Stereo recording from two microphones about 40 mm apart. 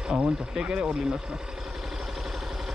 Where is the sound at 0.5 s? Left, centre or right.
Right.